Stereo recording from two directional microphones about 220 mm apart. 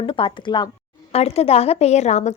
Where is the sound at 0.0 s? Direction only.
25° left (ahead or behind).